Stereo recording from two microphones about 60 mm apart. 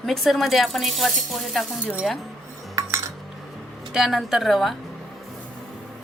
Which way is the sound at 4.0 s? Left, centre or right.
Centre.